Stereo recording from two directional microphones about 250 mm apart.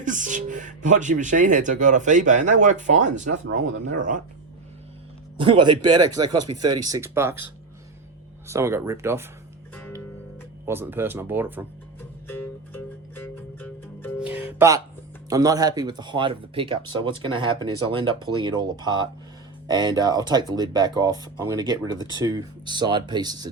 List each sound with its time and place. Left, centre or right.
0.0 s speech: right
5.4 s speech: centre
10.7 s speech: centre
12.3 s music: centre
15.3 s speech: centre